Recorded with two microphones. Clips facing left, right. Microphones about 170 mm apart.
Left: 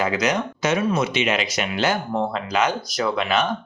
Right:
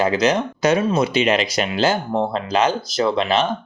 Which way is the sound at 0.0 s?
30° right (ahead or behind).